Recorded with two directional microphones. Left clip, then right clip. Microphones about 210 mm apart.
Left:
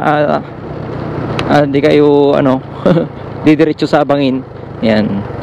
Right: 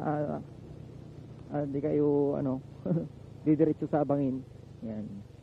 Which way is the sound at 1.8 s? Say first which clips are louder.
Left 17 dB; 15° left (ahead or behind).